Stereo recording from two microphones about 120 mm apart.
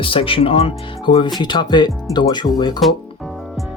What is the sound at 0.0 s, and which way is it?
Speech, 50° left (ahead or behind).